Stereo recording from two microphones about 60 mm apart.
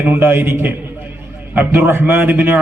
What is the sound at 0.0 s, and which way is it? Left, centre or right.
A man's voice, right.